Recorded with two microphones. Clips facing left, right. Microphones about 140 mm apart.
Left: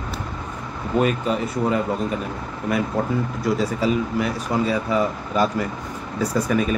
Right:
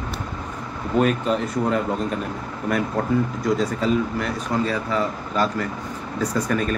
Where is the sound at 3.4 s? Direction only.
5° left (ahead or behind).